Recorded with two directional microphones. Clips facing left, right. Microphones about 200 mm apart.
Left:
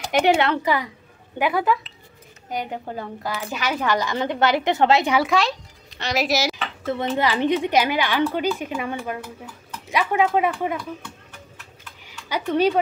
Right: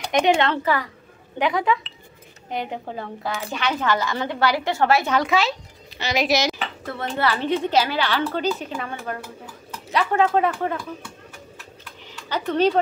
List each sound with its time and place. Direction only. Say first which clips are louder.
0.1 s a woman's voice: left 1 dB; 10° left (ahead or behind)
5.1 s a woman's voice: left 1 dB; centre (ahead or behind)
5.9 s dishes: right 1 dB; centre (ahead or behind)
7.2 s a woman's voice: even; 15° left (ahead or behind)
12.1 s speech: left 1 dB; 10° left (ahead or behind)